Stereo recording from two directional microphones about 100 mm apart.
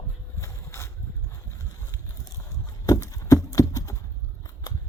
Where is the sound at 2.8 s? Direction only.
35° left (ahead or behind).